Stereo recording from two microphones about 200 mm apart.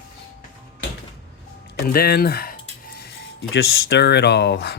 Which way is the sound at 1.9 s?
50° left (ahead or behind).